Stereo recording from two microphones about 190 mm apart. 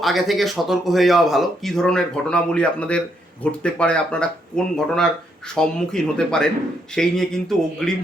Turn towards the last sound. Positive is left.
turn(degrees=5)  # may be behind; listen again after turning